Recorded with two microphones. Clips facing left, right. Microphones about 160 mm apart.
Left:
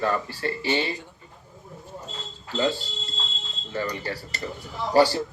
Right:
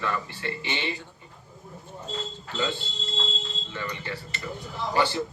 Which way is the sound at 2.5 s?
40° left (ahead or behind).